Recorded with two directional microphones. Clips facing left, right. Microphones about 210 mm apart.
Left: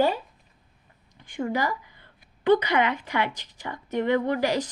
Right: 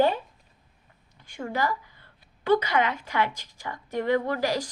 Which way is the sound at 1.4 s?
15° left (ahead or behind).